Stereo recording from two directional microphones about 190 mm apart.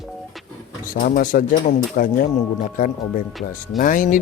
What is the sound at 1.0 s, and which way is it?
Speech, 45° left (ahead or behind).